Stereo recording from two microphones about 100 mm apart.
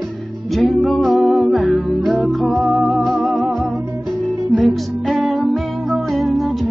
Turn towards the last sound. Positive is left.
turn(degrees=0)  # may be behind; listen again after turning